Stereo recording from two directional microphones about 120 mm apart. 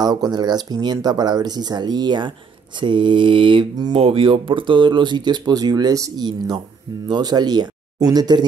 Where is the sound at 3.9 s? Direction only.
50° right (ahead or behind).